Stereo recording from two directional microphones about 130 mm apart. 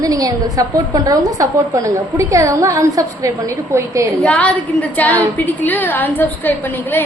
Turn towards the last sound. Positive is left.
turn(degrees=15)  # may be behind; listen again after turning